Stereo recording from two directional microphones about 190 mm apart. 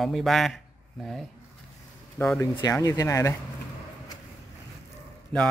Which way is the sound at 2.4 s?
15° left (ahead or behind).